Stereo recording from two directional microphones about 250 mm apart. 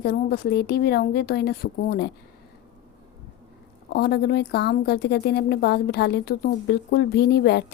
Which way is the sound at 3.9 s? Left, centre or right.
Left.